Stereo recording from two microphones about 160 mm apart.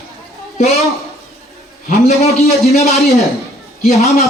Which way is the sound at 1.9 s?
45° left (ahead or behind).